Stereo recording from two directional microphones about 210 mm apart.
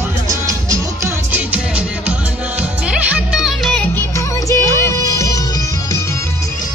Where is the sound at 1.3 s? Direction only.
5° right (ahead or behind).